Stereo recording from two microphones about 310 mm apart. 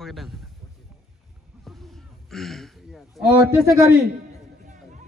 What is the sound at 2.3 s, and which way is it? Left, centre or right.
Speech, centre.